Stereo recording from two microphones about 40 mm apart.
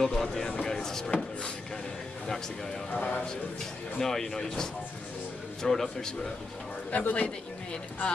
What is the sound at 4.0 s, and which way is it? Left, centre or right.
A man's voice, centre.